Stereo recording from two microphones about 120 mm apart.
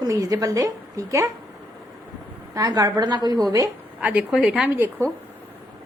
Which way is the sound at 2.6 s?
30° right (ahead or behind).